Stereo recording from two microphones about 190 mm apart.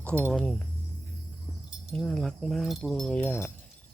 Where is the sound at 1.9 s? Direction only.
Centre (ahead or behind).